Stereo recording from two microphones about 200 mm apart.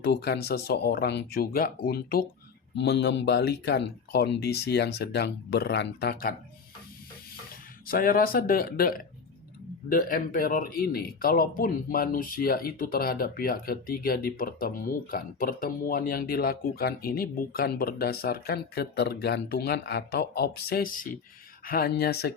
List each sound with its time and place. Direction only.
0.0 s speech: 55° left (ahead or behind)
7.9 s speech: 45° left (ahead or behind)